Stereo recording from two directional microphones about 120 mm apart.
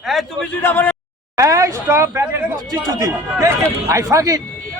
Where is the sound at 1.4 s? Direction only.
25° right (ahead or behind).